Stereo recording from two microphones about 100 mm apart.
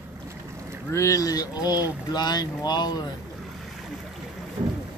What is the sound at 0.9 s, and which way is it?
Speech, 30° left (ahead or behind).